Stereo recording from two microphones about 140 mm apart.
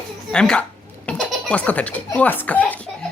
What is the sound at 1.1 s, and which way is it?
Music, 10° left (ahead or behind).